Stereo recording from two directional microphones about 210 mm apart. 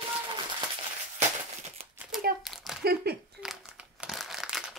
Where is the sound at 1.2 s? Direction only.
30° right (ahead or behind).